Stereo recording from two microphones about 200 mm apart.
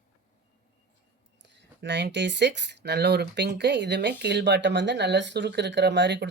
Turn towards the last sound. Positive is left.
turn(degrees=-60)  # may be behind; listen again after turning